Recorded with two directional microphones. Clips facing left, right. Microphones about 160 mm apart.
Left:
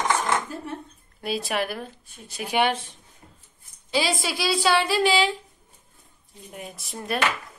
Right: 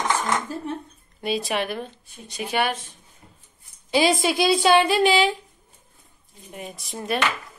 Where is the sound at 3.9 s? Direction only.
20° right (ahead or behind).